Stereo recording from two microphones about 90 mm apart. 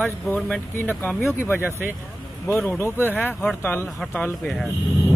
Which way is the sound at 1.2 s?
25° left (ahead or behind).